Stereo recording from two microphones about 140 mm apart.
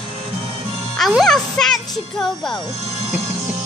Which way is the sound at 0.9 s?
Centre (ahead or behind).